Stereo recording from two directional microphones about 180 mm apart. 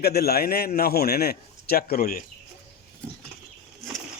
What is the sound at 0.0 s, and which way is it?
A man's voice, 60° left (ahead or behind).